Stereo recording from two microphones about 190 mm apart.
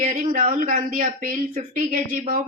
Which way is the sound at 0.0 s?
45° right (ahead or behind).